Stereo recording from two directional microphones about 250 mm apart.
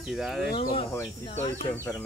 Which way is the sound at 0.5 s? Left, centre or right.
Left.